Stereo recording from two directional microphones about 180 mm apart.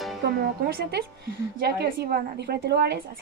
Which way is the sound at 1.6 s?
65° right (ahead or behind).